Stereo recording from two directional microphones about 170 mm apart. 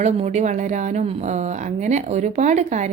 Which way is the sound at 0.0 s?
40° right (ahead or behind).